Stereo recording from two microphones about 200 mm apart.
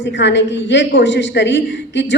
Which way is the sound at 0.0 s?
60° left (ahead or behind).